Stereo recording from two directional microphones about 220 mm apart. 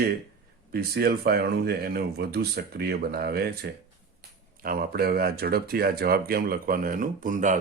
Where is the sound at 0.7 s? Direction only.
45° right (ahead or behind).